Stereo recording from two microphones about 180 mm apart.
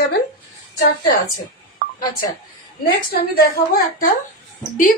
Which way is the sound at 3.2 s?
55° left (ahead or behind).